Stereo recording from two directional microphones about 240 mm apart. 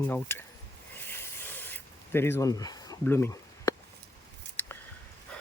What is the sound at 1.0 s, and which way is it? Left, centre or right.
Spray, centre.